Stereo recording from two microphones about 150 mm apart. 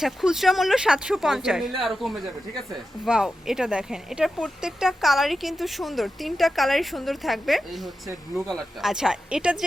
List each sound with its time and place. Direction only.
0.0 s speech: centre (ahead or behind)